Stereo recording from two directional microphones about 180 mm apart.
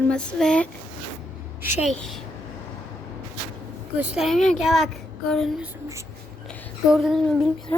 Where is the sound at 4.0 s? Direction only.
5° right (ahead or behind).